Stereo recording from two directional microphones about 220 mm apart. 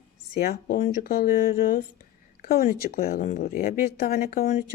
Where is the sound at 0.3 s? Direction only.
45° left (ahead or behind).